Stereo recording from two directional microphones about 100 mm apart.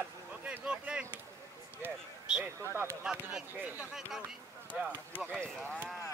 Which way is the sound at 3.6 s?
20° right (ahead or behind).